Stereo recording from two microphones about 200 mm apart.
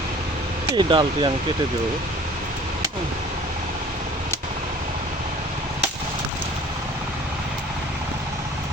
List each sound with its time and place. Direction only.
0.8 s speech: 25° right (ahead or behind)